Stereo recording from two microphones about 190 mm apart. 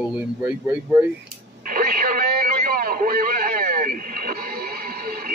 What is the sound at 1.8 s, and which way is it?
Radio, 50° right (ahead or behind).